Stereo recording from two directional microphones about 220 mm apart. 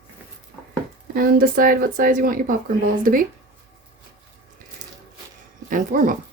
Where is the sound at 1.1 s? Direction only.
40° right (ahead or behind).